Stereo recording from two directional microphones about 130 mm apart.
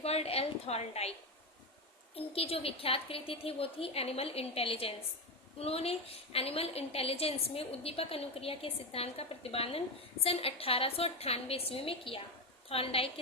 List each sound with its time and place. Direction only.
0.0 s a woman's voice: 50° left (ahead or behind)
2.1 s a woman's voice: 50° left (ahead or behind)